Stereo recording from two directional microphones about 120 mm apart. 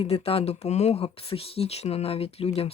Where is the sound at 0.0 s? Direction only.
55° left (ahead or behind).